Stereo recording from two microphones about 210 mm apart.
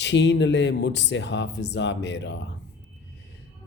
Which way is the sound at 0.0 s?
55° left (ahead or behind).